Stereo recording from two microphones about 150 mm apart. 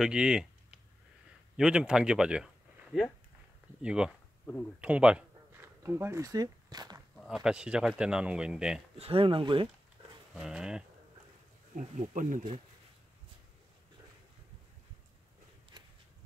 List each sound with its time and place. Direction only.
0.0 s speech: 5° right (ahead or behind)
4.7 s a sound: 10° right (ahead or behind)
5.8 s speech: 15° right (ahead or behind)
7.2 s speech: 5° right (ahead or behind)
8.9 s speech: 40° right (ahead or behind)
10.3 s speech: 5° right (ahead or behind)
12.0 s speech: 60° right (ahead or behind)